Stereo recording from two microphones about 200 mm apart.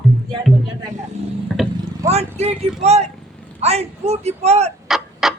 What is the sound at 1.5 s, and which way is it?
Speech, centre (ahead or behind).